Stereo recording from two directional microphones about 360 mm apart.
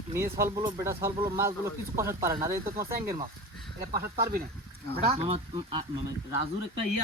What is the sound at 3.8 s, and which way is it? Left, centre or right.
Speech, right.